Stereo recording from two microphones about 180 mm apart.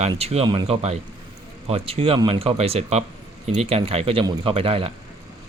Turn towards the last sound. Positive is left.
turn(degrees=-30)  # may be behind; listen again after turning